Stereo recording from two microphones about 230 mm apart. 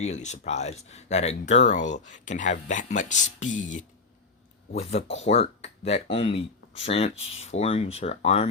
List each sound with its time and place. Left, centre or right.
0.1 s speech: left
4.9 s speech: left